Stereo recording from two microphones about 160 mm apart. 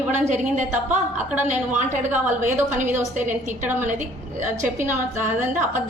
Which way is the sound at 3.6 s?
10° right (ahead or behind).